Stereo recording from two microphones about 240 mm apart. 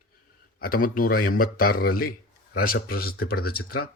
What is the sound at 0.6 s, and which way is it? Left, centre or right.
A man's voice, left.